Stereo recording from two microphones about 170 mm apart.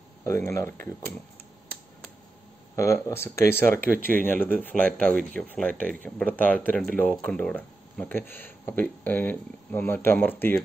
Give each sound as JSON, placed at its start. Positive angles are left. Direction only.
{"t": 0.2, "sound": "speech", "side_deg": 15}
{"t": 2.7, "sound": "speech", "side_deg": 15}